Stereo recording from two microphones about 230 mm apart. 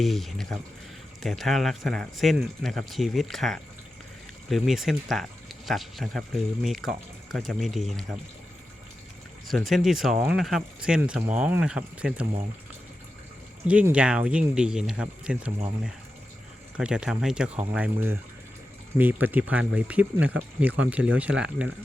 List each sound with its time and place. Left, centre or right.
0.0 s speech: centre
9.5 s speech: centre
13.7 s speech: centre
16.7 s speech: centre